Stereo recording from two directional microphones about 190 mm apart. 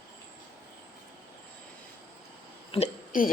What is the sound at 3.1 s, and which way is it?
Speech, 45° left (ahead or behind).